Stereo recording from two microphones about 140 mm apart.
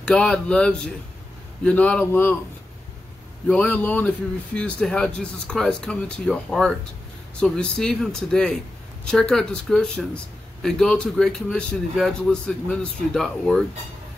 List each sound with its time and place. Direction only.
0.0 s speech: 5° left (ahead or behind)
3.4 s speech: 10° left (ahead or behind)